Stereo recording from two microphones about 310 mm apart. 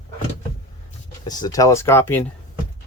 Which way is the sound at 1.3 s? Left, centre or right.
Centre.